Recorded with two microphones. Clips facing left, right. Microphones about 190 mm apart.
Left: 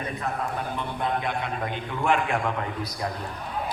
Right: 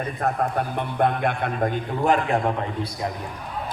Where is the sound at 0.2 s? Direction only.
55° right (ahead or behind); by 2.6 s 35° right (ahead or behind).